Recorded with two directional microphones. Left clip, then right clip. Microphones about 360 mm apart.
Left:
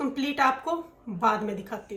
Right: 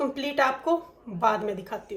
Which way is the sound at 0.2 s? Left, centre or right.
Centre.